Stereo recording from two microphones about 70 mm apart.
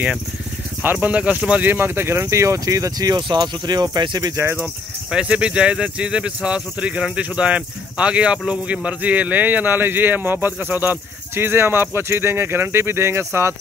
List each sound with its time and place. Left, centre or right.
0.9 s speech: centre
1.7 s speech: right
5.1 s speech: centre; by 13.6 s right